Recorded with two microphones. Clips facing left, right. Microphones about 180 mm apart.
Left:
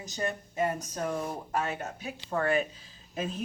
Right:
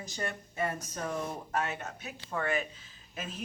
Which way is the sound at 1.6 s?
35° left (ahead or behind).